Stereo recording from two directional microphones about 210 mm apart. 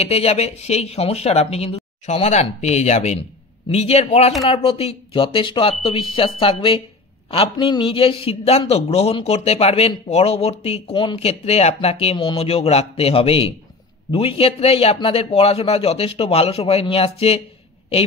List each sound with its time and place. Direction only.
0.0 s a man's voice: 30° left (ahead or behind)